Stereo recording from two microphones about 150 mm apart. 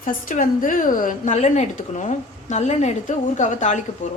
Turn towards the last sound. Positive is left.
turn(degrees=55)  # may be behind; listen again after turning